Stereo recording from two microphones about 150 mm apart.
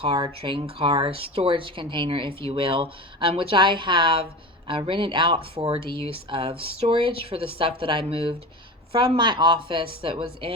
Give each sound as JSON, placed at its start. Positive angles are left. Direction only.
{"t": 0.0, "sound": "speech", "side_deg": -35}